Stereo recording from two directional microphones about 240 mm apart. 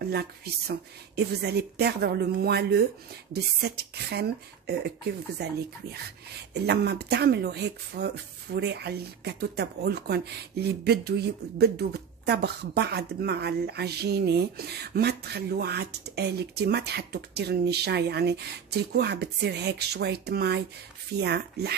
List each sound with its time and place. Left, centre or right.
0.1 s speech: right